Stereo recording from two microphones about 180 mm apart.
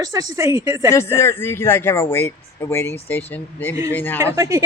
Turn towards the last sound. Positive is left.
turn(degrees=-15)  # may be behind; listen again after turning